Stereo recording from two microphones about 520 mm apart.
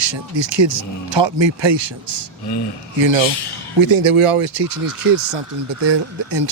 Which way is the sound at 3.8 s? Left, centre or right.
Right.